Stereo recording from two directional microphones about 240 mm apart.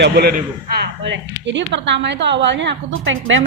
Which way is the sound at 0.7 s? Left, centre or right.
Right.